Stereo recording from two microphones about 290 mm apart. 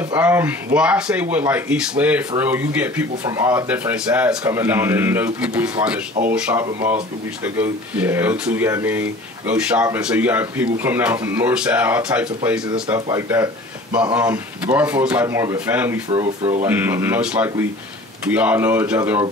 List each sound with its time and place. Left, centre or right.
0.1 s speech: centre
16.1 s speech: centre
16.6 s speech: centre